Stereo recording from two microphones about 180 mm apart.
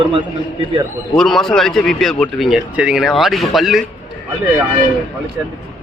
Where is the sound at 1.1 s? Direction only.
Centre (ahead or behind).